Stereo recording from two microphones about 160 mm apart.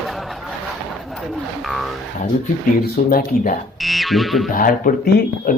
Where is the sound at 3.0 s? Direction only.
60° left (ahead or behind).